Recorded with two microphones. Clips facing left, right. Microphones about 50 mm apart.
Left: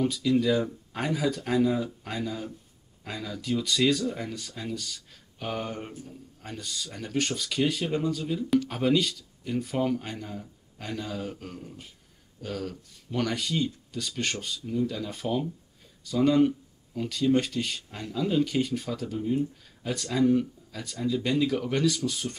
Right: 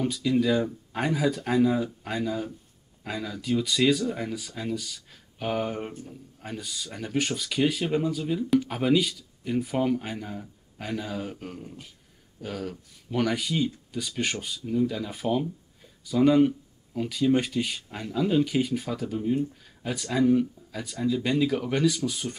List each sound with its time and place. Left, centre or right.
0.0 s speech: centre